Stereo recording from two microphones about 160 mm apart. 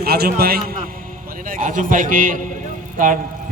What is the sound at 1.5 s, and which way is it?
A man's voice, 55° right (ahead or behind).